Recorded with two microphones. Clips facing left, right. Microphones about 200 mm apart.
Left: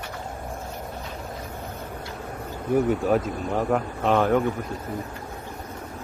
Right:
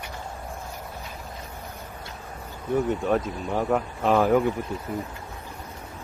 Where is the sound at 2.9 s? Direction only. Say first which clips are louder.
Left 2 dB; centre (ahead or behind).